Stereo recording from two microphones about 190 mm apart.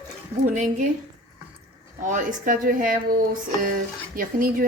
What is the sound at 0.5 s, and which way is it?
Speech, 40° right (ahead or behind).